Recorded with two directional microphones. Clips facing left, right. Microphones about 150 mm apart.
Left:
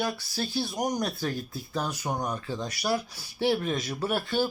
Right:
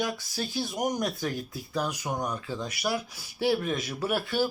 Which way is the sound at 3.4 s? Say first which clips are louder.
Even; 25° left (ahead or behind).